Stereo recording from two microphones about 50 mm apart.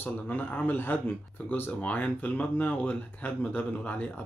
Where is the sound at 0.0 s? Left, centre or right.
Left.